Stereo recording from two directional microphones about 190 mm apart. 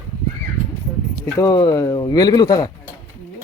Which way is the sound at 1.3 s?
15° left (ahead or behind).